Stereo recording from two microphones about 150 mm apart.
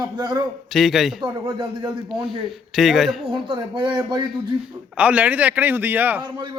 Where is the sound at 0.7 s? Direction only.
Centre (ahead or behind).